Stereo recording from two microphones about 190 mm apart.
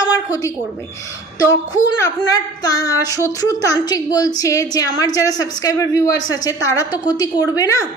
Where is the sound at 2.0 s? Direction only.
20° left (ahead or behind).